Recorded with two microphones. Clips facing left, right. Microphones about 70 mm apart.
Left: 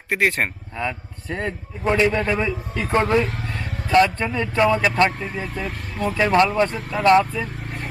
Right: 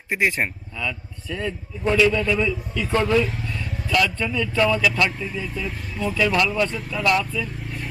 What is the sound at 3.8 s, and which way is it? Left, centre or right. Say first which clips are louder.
Speech: left 5 dB; left.